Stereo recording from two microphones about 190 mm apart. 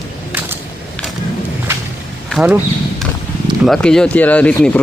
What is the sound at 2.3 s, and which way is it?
Speech, 10° right (ahead or behind).